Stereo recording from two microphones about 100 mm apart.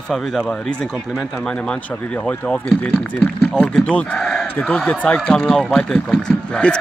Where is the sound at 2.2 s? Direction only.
10° left (ahead or behind).